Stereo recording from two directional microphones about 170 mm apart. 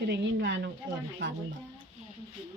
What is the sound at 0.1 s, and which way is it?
Speech, 90° right.